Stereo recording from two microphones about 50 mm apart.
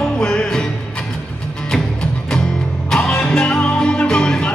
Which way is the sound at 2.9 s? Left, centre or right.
Centre.